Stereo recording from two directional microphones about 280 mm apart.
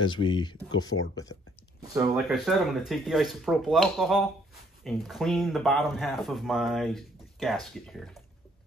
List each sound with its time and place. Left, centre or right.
0.0 s speech: centre
1.8 s speech: centre
2.2 s speech: centre